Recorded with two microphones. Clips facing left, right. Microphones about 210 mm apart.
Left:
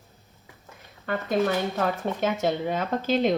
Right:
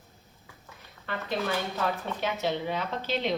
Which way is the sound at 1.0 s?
50° left (ahead or behind).